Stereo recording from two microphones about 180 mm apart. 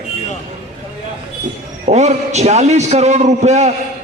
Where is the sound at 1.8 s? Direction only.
40° right (ahead or behind).